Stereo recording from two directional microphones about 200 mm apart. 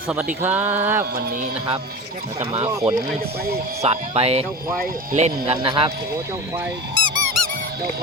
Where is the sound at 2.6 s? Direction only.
15° right (ahead or behind).